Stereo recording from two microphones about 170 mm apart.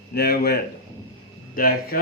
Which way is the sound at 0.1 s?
65° left (ahead or behind).